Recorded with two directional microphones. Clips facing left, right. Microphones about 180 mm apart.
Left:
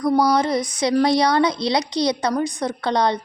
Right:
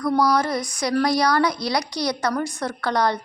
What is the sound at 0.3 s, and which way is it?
Speech, 20° left (ahead or behind).